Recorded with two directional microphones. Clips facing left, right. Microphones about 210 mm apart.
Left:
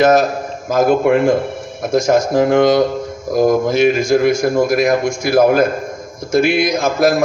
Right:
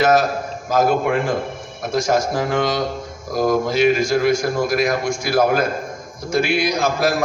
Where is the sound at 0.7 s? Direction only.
45° left (ahead or behind).